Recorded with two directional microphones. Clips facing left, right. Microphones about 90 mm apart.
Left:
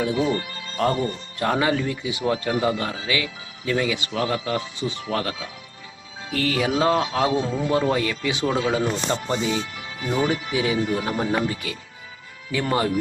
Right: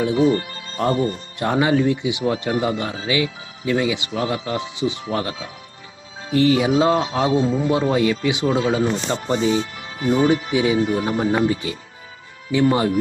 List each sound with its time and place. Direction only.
0.0 s speech: 20° right (ahead or behind)
1.4 s a man's voice: 20° right (ahead or behind)